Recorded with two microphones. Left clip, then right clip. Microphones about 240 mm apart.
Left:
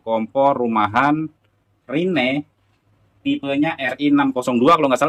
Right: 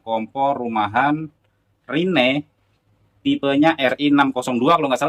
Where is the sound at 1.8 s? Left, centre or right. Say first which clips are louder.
Right 2 dB; centre.